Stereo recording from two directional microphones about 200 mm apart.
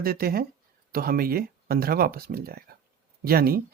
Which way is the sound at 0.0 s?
50° right (ahead or behind).